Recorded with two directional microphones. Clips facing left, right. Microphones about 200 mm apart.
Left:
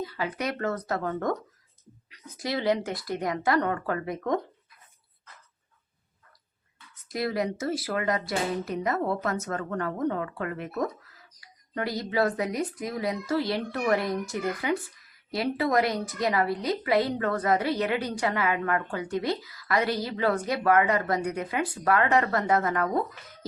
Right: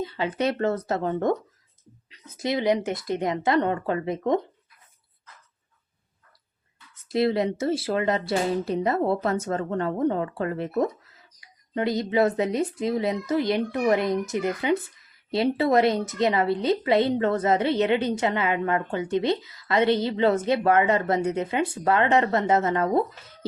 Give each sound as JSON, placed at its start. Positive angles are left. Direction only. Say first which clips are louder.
{"t": 0.0, "sound": "a woman's voice", "louder": "right 5 dB", "side_deg": -25}
{"t": 7.1, "sound": "a woman's voice", "louder": "right 6 dB", "side_deg": -25}